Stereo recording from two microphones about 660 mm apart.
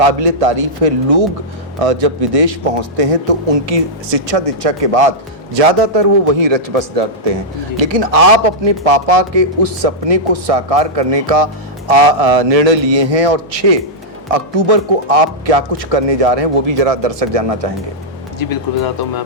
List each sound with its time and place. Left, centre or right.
0.0 s a man's voice: right
18.3 s speech: left